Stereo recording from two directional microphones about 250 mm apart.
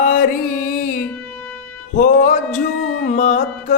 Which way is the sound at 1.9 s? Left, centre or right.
Left.